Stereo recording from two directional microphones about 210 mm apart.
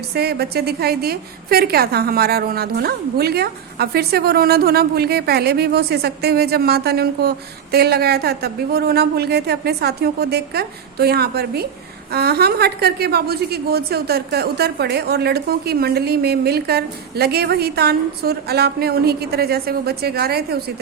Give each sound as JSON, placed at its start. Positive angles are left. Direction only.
{"t": 0.1, "sound": "a woman's voice", "side_deg": -50}